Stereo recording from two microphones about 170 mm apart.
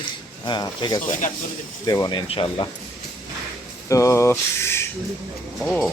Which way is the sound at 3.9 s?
20° left (ahead or behind).